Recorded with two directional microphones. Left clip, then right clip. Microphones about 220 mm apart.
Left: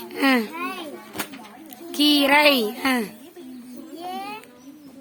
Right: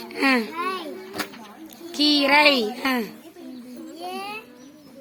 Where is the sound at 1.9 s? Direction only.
15° left (ahead or behind).